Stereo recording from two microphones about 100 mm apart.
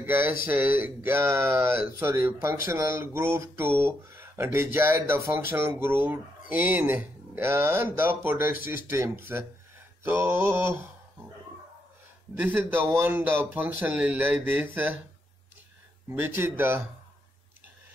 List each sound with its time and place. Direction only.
0.0 s speech: 20° right (ahead or behind)
12.4 s speech: 20° right (ahead or behind)
16.1 s speech: 25° right (ahead or behind)